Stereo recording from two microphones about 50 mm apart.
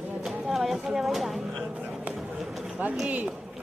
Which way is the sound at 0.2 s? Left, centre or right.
Centre.